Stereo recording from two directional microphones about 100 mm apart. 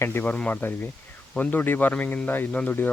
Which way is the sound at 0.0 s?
20° left (ahead or behind).